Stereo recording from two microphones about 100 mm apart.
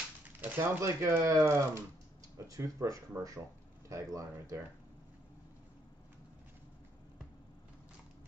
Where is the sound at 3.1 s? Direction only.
15° right (ahead or behind).